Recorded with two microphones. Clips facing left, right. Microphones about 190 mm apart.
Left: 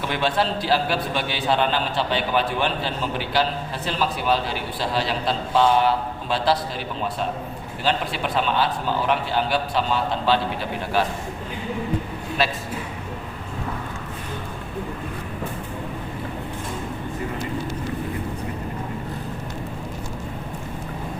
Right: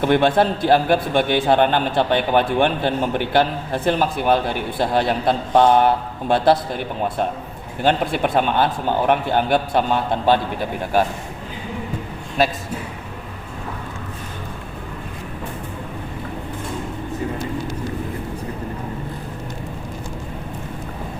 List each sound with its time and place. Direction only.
0.0 s a man's voice: 55° right (ahead or behind)
12.4 s a man's voice: 45° right (ahead or behind)